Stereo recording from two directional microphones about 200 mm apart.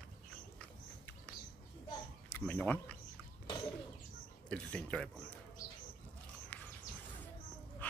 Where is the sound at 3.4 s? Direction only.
25° left (ahead or behind).